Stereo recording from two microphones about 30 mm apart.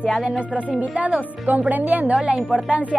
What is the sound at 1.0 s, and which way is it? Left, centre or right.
A woman's voice, right.